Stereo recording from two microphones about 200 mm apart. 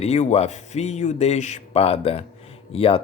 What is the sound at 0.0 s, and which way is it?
Speech, 35° left (ahead or behind).